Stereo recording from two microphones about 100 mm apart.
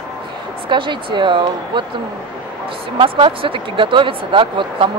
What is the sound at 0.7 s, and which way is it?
Speech, 50° right (ahead or behind).